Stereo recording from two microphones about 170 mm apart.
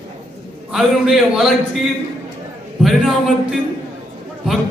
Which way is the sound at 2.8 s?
Centre (ahead or behind).